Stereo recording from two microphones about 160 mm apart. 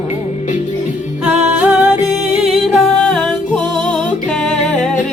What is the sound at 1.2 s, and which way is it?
Music, 5° right (ahead or behind).